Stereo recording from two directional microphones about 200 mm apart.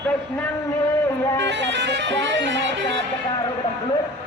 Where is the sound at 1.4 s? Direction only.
60° right (ahead or behind).